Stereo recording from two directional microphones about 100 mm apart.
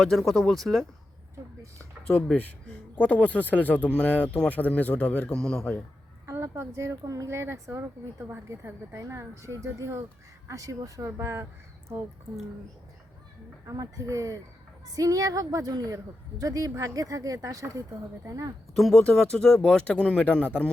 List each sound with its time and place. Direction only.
0.0 s speech: centre (ahead or behind)
2.0 s speech: 10° left (ahead or behind)
6.2 s speech: 30° right (ahead or behind)
13.7 s speech: 35° right (ahead or behind)
18.8 s speech: 5° left (ahead or behind)